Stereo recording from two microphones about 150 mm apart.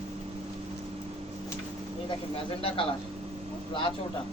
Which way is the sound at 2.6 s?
35° left (ahead or behind).